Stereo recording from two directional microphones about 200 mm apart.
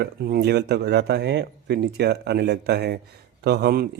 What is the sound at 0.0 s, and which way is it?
A man's voice, 50° right (ahead or behind).